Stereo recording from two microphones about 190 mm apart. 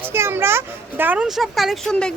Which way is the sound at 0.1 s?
10° right (ahead or behind).